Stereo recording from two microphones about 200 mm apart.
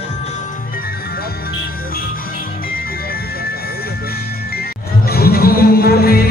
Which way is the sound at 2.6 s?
50° left (ahead or behind).